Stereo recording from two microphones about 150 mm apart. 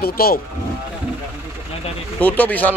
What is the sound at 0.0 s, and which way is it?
Speech, 90° left.